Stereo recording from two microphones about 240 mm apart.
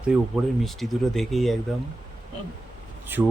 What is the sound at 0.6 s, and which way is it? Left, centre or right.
Speech, centre.